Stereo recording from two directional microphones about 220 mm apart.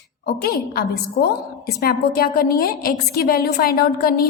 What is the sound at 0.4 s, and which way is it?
A woman's voice, 45° left (ahead or behind).